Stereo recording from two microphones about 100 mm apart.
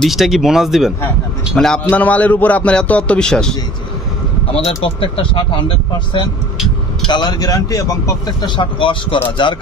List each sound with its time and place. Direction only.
0.0 s speech: centre (ahead or behind)
1.9 s a man's voice: 15° left (ahead or behind)
4.6 s speech: 70° left (ahead or behind)
7.1 s speech: 45° left (ahead or behind)
8.4 s speech: 55° left (ahead or behind)